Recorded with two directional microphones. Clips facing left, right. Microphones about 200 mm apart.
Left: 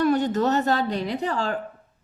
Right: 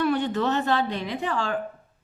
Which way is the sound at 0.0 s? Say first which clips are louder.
Left 3 dB; 40° left (ahead or behind).